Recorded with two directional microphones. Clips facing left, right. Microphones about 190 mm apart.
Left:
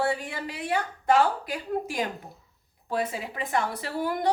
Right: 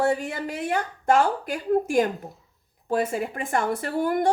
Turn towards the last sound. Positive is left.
turn(degrees=-50)  # may be behind; listen again after turning